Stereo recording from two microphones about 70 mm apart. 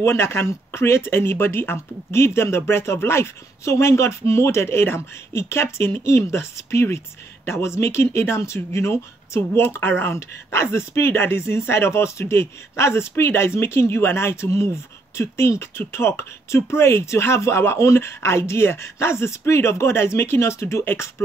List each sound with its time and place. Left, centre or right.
0.0 s speech: left